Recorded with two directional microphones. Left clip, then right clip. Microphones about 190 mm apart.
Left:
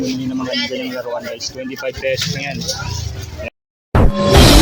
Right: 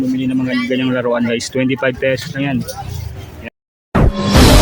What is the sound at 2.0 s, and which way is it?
Speech, 30° right (ahead or behind).